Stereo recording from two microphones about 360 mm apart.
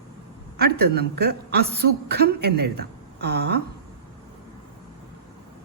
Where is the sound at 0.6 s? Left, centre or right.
Right.